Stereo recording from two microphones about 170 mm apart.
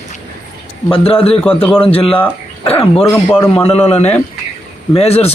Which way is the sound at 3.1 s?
15° left (ahead or behind).